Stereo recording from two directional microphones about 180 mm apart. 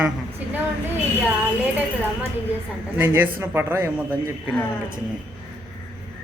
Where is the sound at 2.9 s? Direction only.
10° right (ahead or behind).